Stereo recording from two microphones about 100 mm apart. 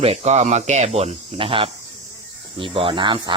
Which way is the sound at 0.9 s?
75° right (ahead or behind).